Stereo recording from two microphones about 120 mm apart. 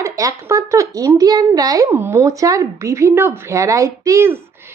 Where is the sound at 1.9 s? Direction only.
20° right (ahead or behind).